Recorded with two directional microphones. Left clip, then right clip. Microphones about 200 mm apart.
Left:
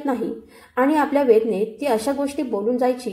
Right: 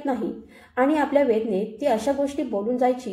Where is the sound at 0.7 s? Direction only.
25° left (ahead or behind).